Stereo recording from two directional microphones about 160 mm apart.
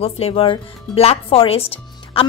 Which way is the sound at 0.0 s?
35° left (ahead or behind).